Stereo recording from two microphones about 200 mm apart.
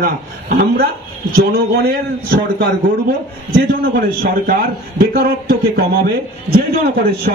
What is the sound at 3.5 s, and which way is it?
A man's voice, 45° right (ahead or behind).